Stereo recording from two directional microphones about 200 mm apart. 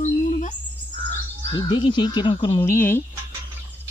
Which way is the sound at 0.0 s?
40° left (ahead or behind).